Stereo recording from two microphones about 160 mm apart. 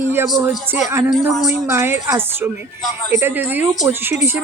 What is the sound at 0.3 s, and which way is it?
Speech, 15° right (ahead or behind).